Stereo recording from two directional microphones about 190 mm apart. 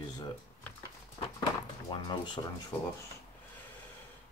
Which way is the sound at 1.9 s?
25° left (ahead or behind).